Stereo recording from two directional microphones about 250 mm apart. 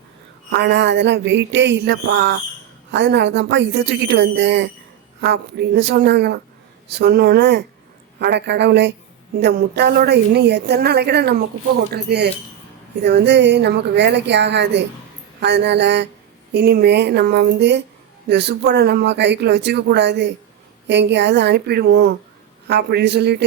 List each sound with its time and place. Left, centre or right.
0.5 s a woman's voice: right